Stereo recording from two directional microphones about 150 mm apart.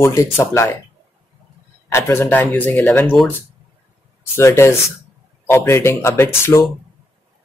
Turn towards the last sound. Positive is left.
turn(degrees=20)  # may be behind; listen again after turning